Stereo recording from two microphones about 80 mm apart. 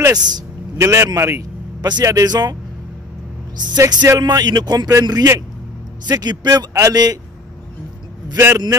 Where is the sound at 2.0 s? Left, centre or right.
Right.